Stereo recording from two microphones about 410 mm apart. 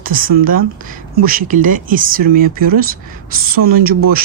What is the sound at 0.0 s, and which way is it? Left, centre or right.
Speech, right.